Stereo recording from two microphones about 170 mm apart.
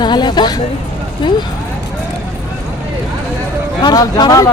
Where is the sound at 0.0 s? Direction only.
25° left (ahead or behind).